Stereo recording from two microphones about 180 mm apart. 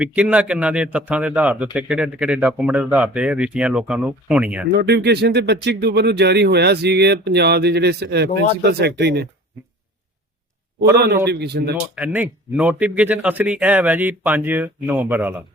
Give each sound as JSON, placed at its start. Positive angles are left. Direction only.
{"t": 0.0, "sound": "a man's voice", "side_deg": -5}
{"t": 4.8, "sound": "speech", "side_deg": -65}
{"t": 11.3, "sound": "speech", "side_deg": -65}
{"t": 11.9, "sound": "a man's voice", "side_deg": -10}